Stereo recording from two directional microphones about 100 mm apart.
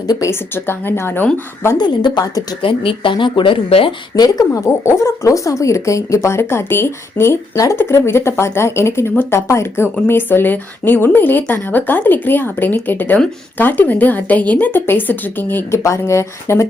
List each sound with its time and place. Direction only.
0.1 s a woman's voice: 30° left (ahead or behind)
0.5 s speech: 20° left (ahead or behind)
1.8 s speech: 50° left (ahead or behind)
2.6 s speech: 60° left (ahead or behind)
4.1 s a woman's voice: 40° left (ahead or behind); by 15.8 s 20° left (ahead or behind)
15.8 s speech: 30° left (ahead or behind)